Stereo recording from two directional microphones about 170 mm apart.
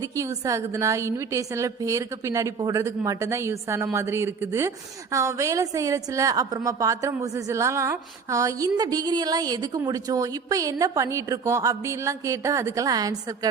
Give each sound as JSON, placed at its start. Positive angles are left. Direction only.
{"t": 0.0, "sound": "a woman's voice", "side_deg": -20}